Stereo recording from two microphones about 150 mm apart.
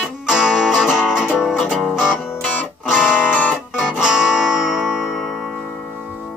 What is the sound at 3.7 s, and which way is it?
Music, 5° right (ahead or behind).